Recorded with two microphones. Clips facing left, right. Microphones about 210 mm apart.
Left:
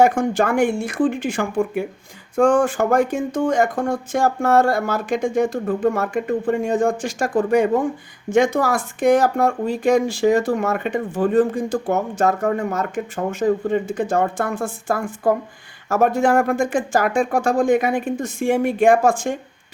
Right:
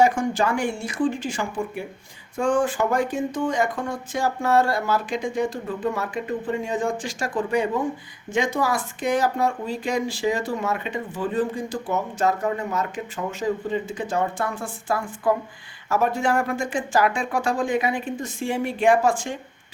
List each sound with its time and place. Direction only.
0.0 s speech: 55° left (ahead or behind)